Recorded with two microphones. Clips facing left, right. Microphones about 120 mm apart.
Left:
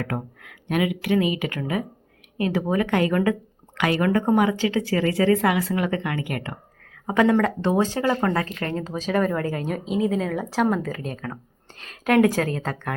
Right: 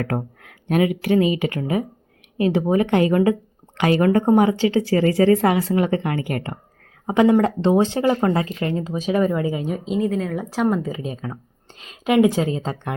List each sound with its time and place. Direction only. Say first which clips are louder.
0.0 s speech: right 4 dB; 40° right (ahead or behind)
7.1 s speech: right 3 dB; 20° right (ahead or behind); by 10.3 s centre (ahead or behind)
10.3 s a woman's voice: right 1 dB; 15° right (ahead or behind)